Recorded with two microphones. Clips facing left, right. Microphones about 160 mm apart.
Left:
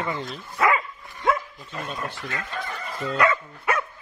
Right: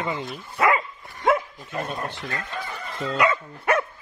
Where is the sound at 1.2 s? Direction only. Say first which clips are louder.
Right 3 dB; 50° right (ahead or behind).